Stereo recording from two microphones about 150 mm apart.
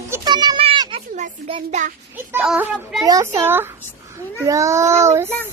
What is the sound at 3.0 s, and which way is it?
Child singing, 25° right (ahead or behind).